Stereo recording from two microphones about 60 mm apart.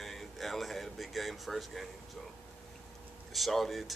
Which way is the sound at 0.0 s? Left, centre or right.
Centre.